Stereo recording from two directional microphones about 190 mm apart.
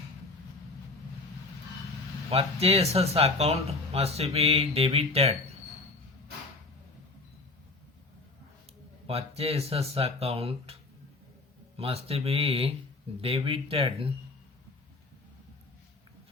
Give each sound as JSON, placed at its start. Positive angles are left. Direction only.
{"t": 2.3, "sound": "speech", "side_deg": -30}
{"t": 9.0, "sound": "speech", "side_deg": -30}
{"t": 11.8, "sound": "speech", "side_deg": -30}